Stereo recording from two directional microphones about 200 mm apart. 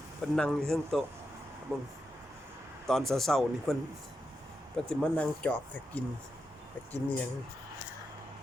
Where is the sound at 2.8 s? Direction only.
Centre (ahead or behind).